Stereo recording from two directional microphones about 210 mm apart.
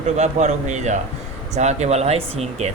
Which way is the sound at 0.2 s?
30° right (ahead or behind).